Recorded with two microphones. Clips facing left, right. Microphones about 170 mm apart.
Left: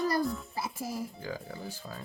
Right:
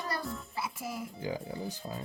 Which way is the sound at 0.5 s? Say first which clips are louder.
Left 2 dB; 35° left (ahead or behind).